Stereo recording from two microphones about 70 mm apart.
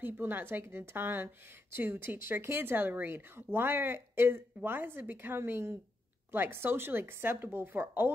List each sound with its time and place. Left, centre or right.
0.0 s a woman's voice: right